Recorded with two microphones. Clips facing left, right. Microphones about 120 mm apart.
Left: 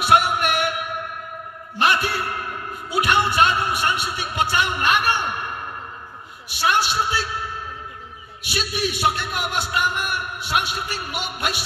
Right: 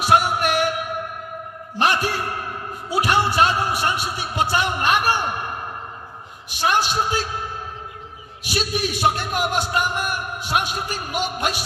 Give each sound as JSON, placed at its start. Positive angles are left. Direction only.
{"t": 0.0, "sound": "music", "side_deg": -40}
{"t": 1.8, "sound": "a man's voice", "side_deg": -40}